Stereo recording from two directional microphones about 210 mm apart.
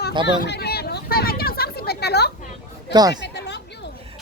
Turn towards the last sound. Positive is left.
turn(degrees=55)  # may be behind; listen again after turning